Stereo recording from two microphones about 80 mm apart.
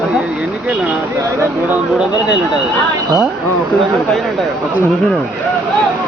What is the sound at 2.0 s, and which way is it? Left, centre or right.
Speech, centre.